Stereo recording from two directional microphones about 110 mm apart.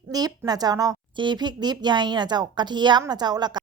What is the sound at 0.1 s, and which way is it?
A woman's voice, 35° right (ahead or behind).